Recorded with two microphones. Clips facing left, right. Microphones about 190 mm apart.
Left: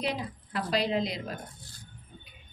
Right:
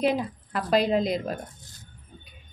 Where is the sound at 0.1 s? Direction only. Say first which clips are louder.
Right 6 dB; 45° right (ahead or behind).